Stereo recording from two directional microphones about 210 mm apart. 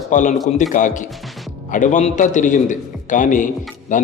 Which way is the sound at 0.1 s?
35° left (ahead or behind).